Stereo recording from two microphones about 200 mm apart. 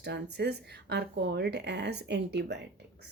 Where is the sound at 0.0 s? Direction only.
55° right (ahead or behind).